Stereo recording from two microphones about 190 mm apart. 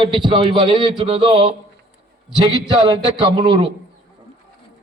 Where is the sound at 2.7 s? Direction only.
25° right (ahead or behind).